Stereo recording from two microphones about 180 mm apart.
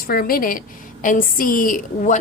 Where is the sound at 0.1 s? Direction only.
55° left (ahead or behind).